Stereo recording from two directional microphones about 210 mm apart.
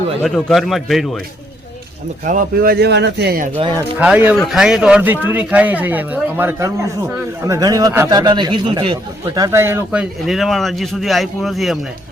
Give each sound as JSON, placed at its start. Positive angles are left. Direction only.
{"t": 0.2, "sound": "speech", "side_deg": 5}
{"t": 2.2, "sound": "speech", "side_deg": -40}
{"t": 3.8, "sound": "a man's voice", "side_deg": -5}